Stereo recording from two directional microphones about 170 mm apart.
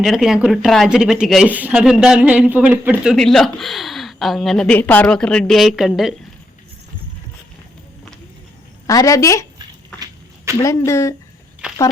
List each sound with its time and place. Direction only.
0.0 s speech: centre (ahead or behind)
8.9 s speech: 20° left (ahead or behind)
10.0 s a sound: 15° right (ahead or behind)
10.6 s speech: 20° left (ahead or behind)